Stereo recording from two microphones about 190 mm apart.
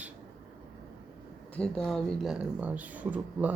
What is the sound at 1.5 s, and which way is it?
Speech, 5° left (ahead or behind).